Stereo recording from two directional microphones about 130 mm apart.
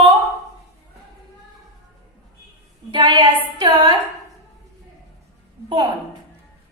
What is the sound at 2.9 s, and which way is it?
A woman's voice, 35° right (ahead or behind).